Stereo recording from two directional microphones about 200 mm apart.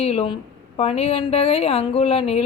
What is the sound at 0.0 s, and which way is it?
Speech, 30° left (ahead or behind).